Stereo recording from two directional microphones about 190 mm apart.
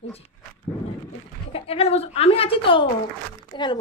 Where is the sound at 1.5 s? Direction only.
30° left (ahead or behind).